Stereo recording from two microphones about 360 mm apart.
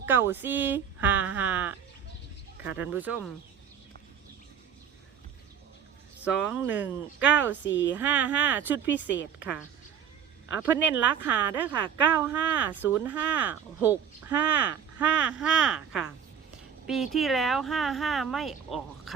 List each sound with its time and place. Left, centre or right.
0.0 s speech: centre
6.2 s speech: centre
7.5 s a woman's voice: left
7.9 s a woman's voice: centre